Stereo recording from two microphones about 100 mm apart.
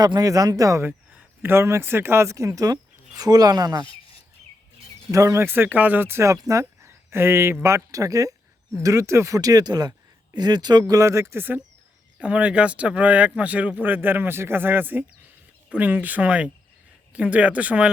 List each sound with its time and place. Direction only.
0.0 s speech: 40° right (ahead or behind)
3.8 s bird: 65° left (ahead or behind)
5.1 s speech: 30° right (ahead or behind); by 17.9 s 10° right (ahead or behind)